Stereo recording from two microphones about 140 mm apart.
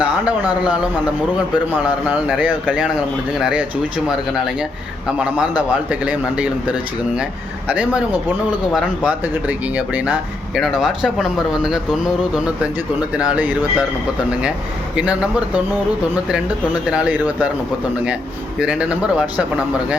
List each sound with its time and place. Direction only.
0.0 s a man's voice: 10° right (ahead or behind)
2.0 s a man's voice: 5° right (ahead or behind)
14.9 s a man's voice: 5° right (ahead or behind)
16.8 s a man's voice: 5° right (ahead or behind)
18.6 s a man's voice: 5° right (ahead or behind)